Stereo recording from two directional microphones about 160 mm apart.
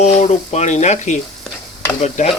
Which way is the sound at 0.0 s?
45° left (ahead or behind).